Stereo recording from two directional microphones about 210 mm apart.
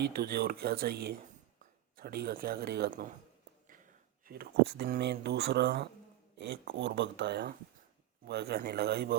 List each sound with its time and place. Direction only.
0.0 s speech: 50° right (ahead or behind)
4.3 s speech: 50° right (ahead or behind)